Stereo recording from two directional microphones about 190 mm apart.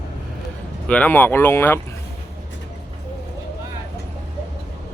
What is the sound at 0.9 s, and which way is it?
Speech, 10° left (ahead or behind).